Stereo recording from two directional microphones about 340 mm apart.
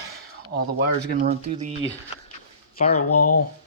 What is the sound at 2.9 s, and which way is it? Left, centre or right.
Speech, left.